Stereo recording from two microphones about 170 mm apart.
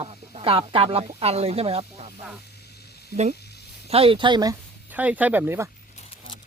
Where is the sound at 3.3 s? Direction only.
75° left (ahead or behind).